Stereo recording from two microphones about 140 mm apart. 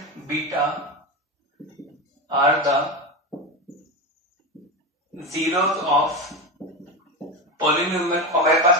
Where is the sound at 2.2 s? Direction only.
25° right (ahead or behind).